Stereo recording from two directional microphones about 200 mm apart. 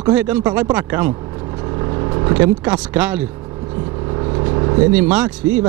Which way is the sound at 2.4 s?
10° right (ahead or behind).